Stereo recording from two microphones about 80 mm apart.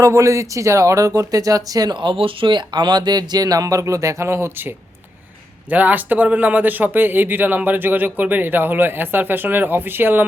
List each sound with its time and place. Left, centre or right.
0.0 s speech: right
1.9 s speech: right
5.7 s speech: right